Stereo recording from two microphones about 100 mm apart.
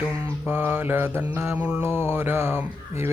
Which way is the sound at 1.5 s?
15° right (ahead or behind).